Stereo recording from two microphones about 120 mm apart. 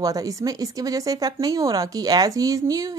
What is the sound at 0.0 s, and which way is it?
Speech, 30° right (ahead or behind).